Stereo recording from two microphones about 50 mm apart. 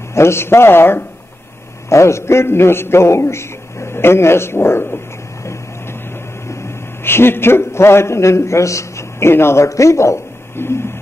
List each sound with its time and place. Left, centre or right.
0.1 s a man's voice: left
1.9 s a man's voice: left
7.1 s a man's voice: left
9.3 s a man's voice: left
10.5 s a sound: left